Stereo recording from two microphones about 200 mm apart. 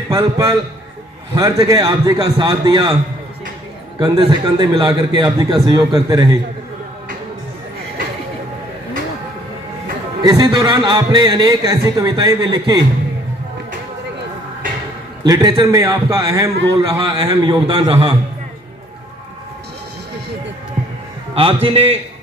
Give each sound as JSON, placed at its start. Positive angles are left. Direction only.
{"t": 0.1, "sound": "a man's voice", "side_deg": -20}
{"t": 4.0, "sound": "a man's voice", "side_deg": -20}
{"t": 10.2, "sound": "a man's voice", "side_deg": -20}
{"t": 15.2, "sound": "a man's voice", "side_deg": -20}
{"t": 21.4, "sound": "a man's voice", "side_deg": -25}